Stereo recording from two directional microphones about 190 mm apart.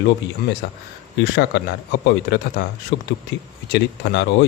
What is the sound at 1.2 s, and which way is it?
A man's voice, 65° left (ahead or behind).